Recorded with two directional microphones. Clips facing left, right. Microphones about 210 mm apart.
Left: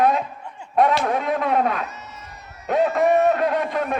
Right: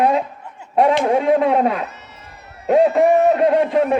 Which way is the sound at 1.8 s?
60° right (ahead or behind).